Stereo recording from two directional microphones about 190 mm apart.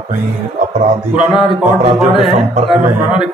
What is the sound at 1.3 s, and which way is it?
Speech, 5° right (ahead or behind).